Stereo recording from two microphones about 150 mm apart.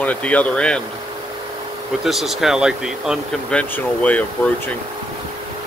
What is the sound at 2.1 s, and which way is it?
Speech, centre (ahead or behind).